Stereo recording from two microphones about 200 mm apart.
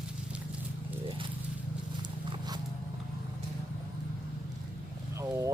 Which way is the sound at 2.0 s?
20° right (ahead or behind).